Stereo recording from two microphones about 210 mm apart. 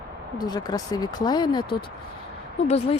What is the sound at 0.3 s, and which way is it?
Speech, 20° left (ahead or behind).